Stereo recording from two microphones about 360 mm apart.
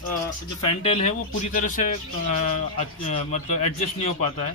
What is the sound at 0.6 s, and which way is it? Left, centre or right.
Speech, centre.